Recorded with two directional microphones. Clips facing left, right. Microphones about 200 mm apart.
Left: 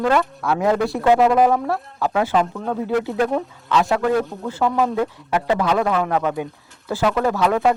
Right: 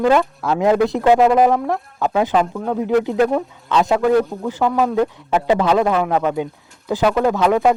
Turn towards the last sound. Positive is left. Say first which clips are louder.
# right 3 dB
turn(degrees=-15)  # may be behind; listen again after turning